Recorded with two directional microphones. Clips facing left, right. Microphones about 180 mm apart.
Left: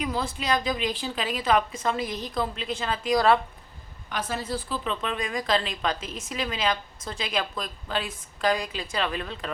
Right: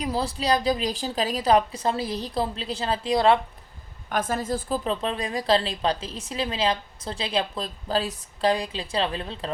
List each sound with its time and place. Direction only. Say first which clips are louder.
0.0 s a woman's voice: right 3 dB; 35° right (ahead or behind)
4.1 s a woman's voice: right 4 dB; 50° right (ahead or behind); by 9.5 s 30° right (ahead or behind)